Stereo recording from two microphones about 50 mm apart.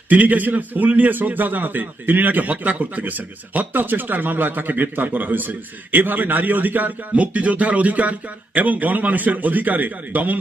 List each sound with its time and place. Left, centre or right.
0.1 s a man's voice: right